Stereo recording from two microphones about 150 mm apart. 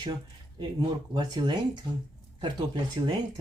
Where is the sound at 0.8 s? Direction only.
30° right (ahead or behind).